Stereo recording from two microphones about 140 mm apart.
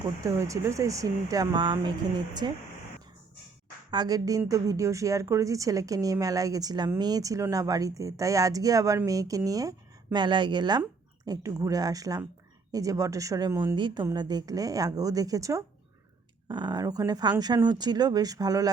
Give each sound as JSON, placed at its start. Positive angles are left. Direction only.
{"t": 0.2, "sound": "a woman's voice", "side_deg": -20}
{"t": 3.9, "sound": "a woman's voice", "side_deg": -30}
{"t": 13.7, "sound": "a woman's voice", "side_deg": -35}